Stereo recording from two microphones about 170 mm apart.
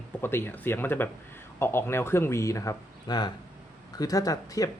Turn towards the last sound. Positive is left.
turn(degrees=20)  # may be behind; listen again after turning